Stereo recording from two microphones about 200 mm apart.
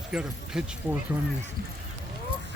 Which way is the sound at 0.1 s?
5° right (ahead or behind).